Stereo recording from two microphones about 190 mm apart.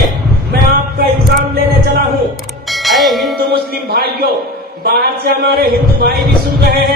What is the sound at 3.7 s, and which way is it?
A man's voice, 55° right (ahead or behind).